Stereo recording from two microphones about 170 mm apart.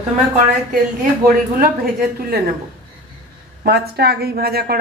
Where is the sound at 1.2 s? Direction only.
60° right (ahead or behind).